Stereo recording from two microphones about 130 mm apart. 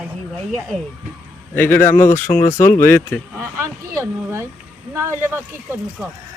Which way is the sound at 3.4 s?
20° right (ahead or behind).